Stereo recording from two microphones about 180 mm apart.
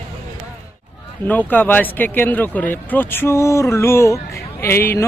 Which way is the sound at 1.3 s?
10° left (ahead or behind).